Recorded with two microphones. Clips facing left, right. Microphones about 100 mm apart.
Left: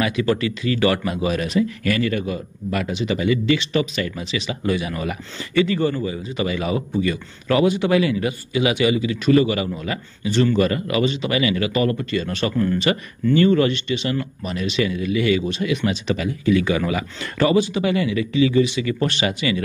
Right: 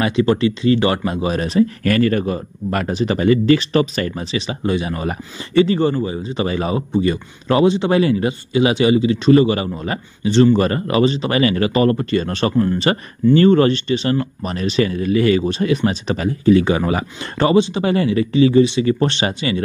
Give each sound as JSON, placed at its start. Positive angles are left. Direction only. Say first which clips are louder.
{"t": 0.0, "sound": "speech", "louder": "right 4 dB", "side_deg": -30}